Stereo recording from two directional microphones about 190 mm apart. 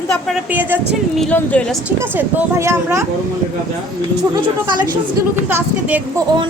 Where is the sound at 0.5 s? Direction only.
10° right (ahead or behind).